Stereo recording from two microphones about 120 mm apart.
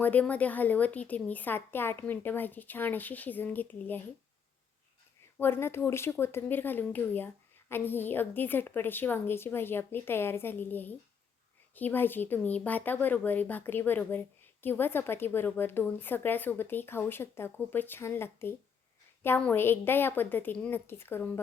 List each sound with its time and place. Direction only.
0.0 s speech: 15° left (ahead or behind)
5.4 s speech: 20° left (ahead or behind)